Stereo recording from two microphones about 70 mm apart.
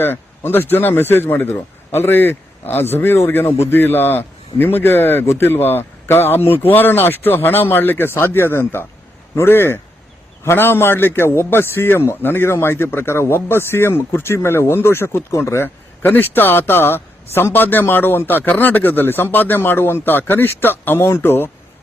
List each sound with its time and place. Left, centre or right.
0.0 s a man's voice: left